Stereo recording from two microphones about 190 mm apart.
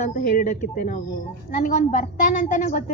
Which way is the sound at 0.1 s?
45° left (ahead or behind).